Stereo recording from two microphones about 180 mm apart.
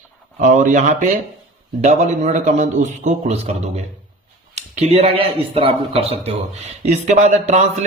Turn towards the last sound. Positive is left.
turn(degrees=-40)  # may be behind; listen again after turning